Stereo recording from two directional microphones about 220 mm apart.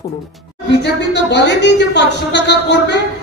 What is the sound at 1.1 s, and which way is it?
A woman's voice, 50° left (ahead or behind).